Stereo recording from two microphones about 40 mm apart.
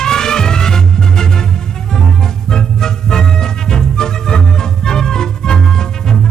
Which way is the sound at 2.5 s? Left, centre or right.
Centre.